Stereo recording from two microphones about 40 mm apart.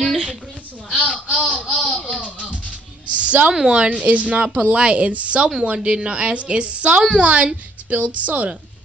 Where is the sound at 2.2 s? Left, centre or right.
Left.